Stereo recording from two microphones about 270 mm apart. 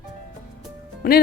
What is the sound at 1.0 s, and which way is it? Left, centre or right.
Speech, left.